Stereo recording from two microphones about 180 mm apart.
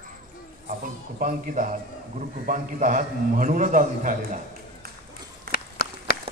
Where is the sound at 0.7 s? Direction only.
45° right (ahead or behind).